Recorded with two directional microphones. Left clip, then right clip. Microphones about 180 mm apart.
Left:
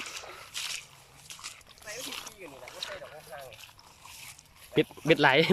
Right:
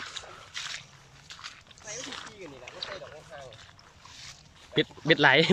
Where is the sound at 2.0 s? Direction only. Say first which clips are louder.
Even; 15° left (ahead or behind).